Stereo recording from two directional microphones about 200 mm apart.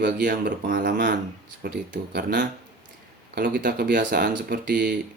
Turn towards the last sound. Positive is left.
turn(degrees=-55)  # may be behind; listen again after turning